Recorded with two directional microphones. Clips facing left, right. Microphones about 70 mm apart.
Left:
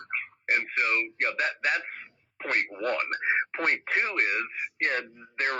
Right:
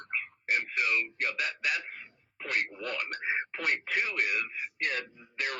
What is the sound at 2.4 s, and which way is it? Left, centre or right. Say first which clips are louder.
Speech: left 5 dB; left.